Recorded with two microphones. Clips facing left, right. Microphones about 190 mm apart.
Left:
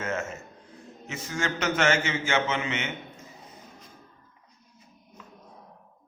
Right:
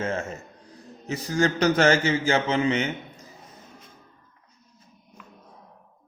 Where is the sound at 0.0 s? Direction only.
30° right (ahead or behind).